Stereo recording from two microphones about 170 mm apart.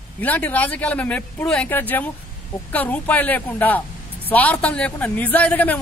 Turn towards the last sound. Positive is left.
turn(degrees=10)  # may be behind; listen again after turning